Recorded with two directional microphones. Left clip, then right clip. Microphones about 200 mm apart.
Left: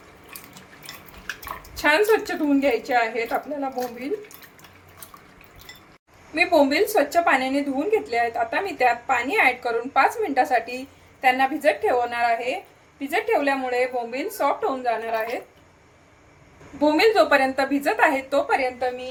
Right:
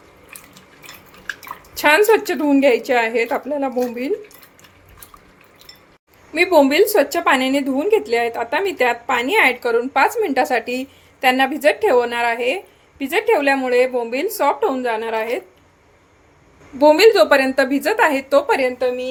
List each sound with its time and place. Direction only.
1.7 s a woman's voice: 50° right (ahead or behind)
6.3 s a woman's voice: 50° right (ahead or behind)
16.7 s a woman's voice: 55° right (ahead or behind)